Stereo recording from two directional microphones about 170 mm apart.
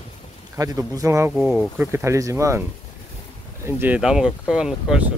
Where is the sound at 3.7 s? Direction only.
10° right (ahead or behind).